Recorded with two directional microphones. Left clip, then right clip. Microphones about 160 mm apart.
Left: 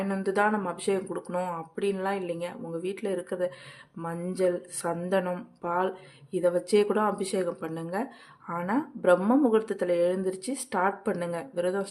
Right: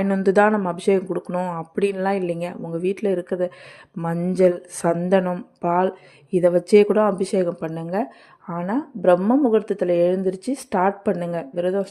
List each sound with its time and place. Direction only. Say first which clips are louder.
0.1 s speech: right 9 dB; 35° right (ahead or behind)
1.7 s speech: right 9 dB; 40° right (ahead or behind); by 11.9 s 20° right (ahead or behind)